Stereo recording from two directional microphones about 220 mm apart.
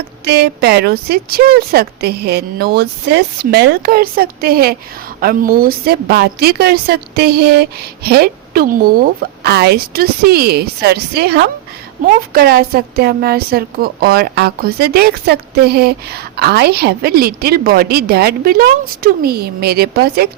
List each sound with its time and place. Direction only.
0.3 s a woman's voice: 45° right (ahead or behind)